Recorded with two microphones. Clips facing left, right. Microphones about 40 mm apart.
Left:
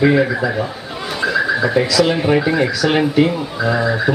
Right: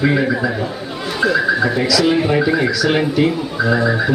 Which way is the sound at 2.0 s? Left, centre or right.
Centre.